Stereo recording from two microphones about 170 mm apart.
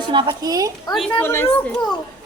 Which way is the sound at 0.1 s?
25° right (ahead or behind).